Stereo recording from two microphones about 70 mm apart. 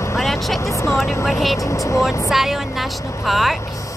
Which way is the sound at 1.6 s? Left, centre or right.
Left.